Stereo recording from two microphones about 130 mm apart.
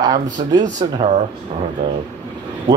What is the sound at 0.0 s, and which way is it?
Speech, 30° right (ahead or behind).